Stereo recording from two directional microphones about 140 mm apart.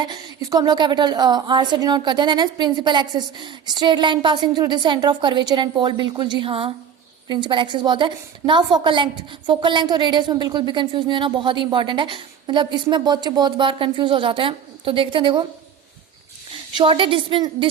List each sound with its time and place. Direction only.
0.0 s a woman's voice: 30° right (ahead or behind)
16.7 s a woman's voice: 40° right (ahead or behind)